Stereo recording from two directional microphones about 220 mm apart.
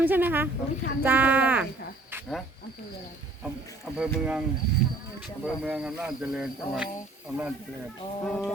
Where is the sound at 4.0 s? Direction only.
5° right (ahead or behind).